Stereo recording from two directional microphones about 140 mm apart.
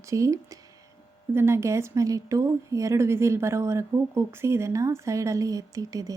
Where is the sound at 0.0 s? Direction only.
20° right (ahead or behind).